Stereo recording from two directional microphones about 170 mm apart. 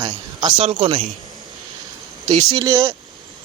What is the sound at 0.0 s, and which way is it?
Speech, 25° right (ahead or behind).